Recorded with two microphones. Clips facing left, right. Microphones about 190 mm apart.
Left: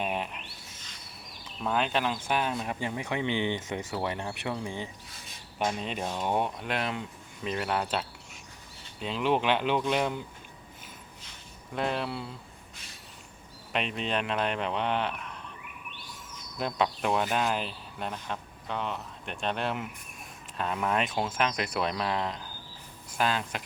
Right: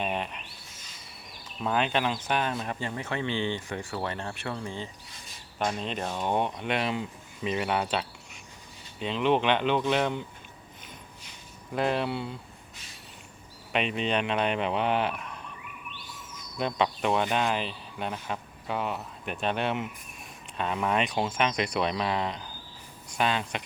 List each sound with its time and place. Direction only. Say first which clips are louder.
0.0 s a sound: right 1 dB; 5° left (ahead or behind)
1.3 s speech: right 1 dB; centre (ahead or behind)
2.8 s speech: left 2 dB; 15° left (ahead or behind)
11.7 s speech: right 3 dB; centre (ahead or behind)
13.7 s speech: right 3 dB; centre (ahead or behind)
16.6 s speech: right 2 dB; centre (ahead or behind)